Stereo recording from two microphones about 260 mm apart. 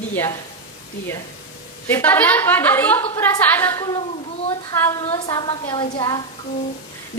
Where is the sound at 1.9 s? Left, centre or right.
Centre.